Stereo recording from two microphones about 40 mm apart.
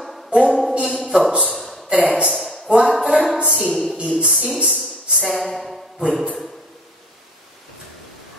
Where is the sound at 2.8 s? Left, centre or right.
Centre.